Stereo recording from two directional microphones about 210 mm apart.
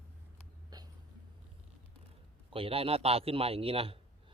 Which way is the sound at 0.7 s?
20° right (ahead or behind).